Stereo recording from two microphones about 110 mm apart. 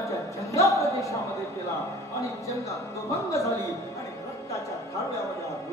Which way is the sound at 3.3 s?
25° left (ahead or behind).